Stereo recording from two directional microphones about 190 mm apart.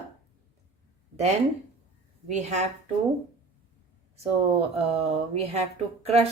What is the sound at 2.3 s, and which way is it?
Speech, 35° right (ahead or behind).